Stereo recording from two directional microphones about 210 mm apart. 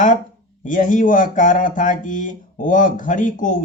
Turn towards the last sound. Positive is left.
turn(degrees=40)  # may be behind; listen again after turning